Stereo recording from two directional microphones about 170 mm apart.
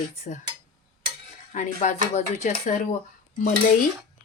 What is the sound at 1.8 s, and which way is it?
Speech, 45° left (ahead or behind).